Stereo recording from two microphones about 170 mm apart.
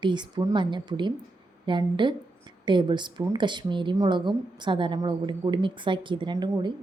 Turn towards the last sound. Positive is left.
turn(degrees=-25)  # may be behind; listen again after turning